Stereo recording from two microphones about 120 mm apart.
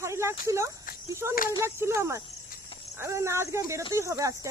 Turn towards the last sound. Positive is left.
turn(degrees=-25)  # may be behind; listen again after turning